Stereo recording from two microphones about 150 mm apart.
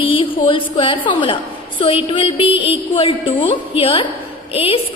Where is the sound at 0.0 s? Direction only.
35° left (ahead or behind).